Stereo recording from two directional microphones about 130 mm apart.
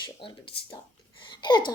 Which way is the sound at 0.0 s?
40° left (ahead or behind).